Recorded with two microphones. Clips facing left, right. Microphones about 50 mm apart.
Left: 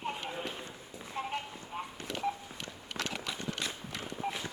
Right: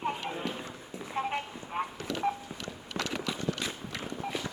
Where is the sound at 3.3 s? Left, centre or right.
Right.